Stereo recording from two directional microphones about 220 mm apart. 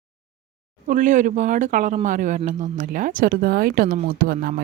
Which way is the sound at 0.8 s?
35° right (ahead or behind).